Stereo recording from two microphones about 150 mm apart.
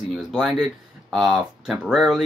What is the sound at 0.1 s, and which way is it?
Speech, 5° right (ahead or behind).